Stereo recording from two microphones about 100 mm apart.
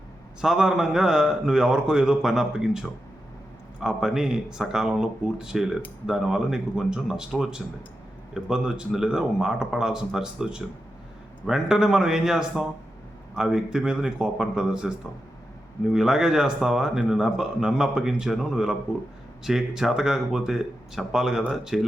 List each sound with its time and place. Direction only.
0.4 s a man's voice: 5° right (ahead or behind)